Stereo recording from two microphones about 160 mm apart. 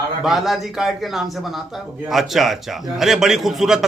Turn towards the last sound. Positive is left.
turn(degrees=0)  # may be behind; listen again after turning